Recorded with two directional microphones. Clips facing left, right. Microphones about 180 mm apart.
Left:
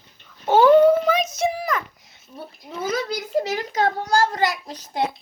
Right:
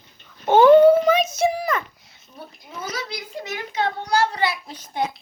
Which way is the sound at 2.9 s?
45° left (ahead or behind).